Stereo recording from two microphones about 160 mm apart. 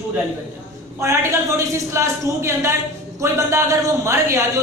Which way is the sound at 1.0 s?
15° right (ahead or behind).